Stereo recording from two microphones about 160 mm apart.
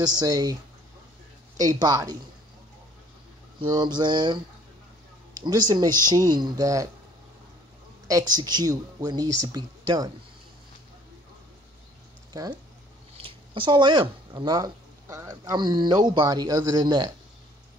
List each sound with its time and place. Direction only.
0.0 s speech: 25° right (ahead or behind)
1.6 s speech: 25° right (ahead or behind)
3.6 s speech: 25° right (ahead or behind)
8.1 s speech: 25° right (ahead or behind)
12.3 s speech: 25° right (ahead or behind)